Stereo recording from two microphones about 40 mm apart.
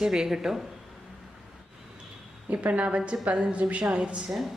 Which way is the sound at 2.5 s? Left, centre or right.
Right.